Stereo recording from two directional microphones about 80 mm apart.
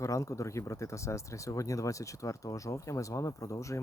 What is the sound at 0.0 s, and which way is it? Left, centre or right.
Speech, left.